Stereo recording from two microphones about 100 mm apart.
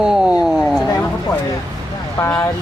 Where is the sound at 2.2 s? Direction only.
25° left (ahead or behind).